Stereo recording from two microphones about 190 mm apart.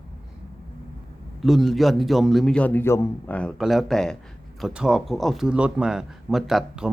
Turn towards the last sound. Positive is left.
turn(degrees=0)  # may be behind; listen again after turning